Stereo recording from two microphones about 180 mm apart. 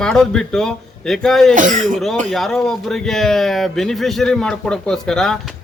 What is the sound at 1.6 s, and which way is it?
Speech, 45° right (ahead or behind).